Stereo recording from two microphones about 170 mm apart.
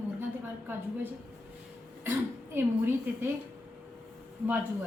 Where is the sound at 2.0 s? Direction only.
15° right (ahead or behind).